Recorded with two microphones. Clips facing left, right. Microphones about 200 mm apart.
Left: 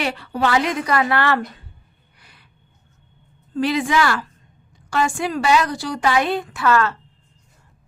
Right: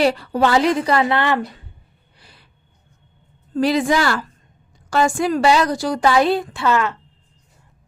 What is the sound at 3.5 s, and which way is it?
A woman's voice, 40° right (ahead or behind).